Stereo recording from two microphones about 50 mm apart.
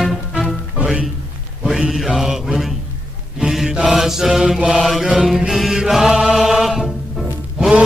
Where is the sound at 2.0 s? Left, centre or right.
Centre.